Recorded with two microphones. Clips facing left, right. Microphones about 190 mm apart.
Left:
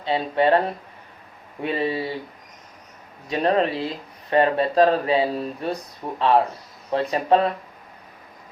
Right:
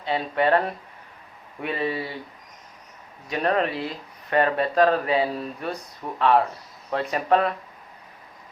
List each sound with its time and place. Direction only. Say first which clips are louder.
0.0 s speech: left 3 dB; 25° left (ahead or behind)
1.6 s speech: left 3 dB; 30° left (ahead or behind)
3.2 s speech: left 3 dB; 25° left (ahead or behind)